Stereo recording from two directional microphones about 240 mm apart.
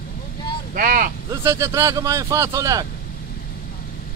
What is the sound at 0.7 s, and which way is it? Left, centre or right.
Vehicle, right.